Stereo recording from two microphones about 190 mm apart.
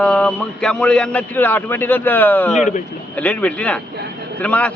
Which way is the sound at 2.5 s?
40° left (ahead or behind).